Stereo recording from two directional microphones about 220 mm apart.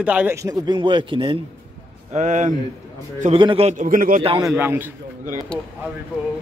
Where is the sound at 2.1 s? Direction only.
35° right (ahead or behind).